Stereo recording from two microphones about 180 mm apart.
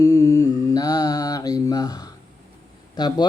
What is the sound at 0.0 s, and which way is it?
Mantra, 20° left (ahead or behind).